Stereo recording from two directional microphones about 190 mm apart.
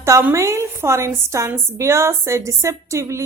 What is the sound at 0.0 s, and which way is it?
A woman's voice, 10° right (ahead or behind).